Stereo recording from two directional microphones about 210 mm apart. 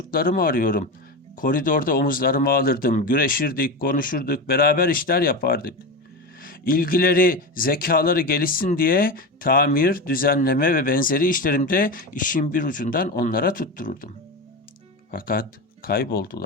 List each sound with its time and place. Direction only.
0.1 s a man's voice: 45° left (ahead or behind)
15.1 s speech: 45° left (ahead or behind)